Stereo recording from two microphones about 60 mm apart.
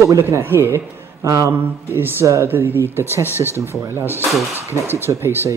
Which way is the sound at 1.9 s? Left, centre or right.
Right.